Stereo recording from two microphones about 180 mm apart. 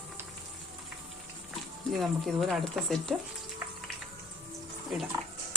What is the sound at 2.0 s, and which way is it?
A woman's voice, centre (ahead or behind).